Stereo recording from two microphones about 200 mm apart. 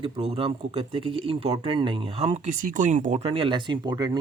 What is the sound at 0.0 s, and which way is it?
Speech, 30° right (ahead or behind).